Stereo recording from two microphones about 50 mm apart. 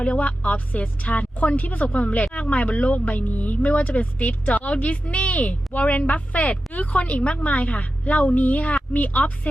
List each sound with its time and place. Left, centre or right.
0.0 s a woman's voice: left